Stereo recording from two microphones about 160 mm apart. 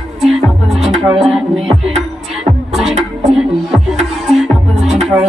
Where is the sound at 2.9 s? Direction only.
45° right (ahead or behind).